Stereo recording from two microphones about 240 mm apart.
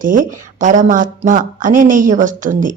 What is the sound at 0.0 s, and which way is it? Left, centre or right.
Speech, right.